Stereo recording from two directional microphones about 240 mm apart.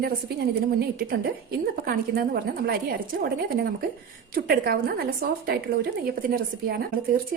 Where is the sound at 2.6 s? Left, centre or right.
Right.